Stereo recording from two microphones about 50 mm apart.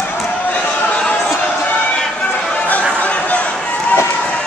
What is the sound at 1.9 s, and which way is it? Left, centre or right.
Run, centre.